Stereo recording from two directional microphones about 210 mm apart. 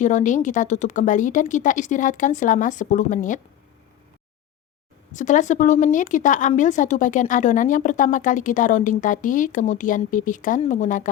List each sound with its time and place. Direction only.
0.0 s speech: 35° left (ahead or behind)
5.1 s speech: 35° left (ahead or behind)